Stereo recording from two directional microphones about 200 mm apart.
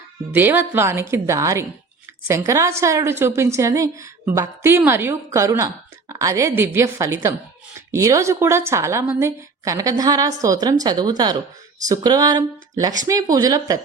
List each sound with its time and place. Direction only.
0.3 s a woman's voice: 10° right (ahead or behind)